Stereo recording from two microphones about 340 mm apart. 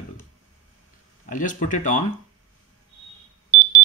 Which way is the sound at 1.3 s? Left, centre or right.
Left.